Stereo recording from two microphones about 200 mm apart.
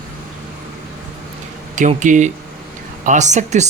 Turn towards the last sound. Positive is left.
turn(degrees=-35)  # may be behind; listen again after turning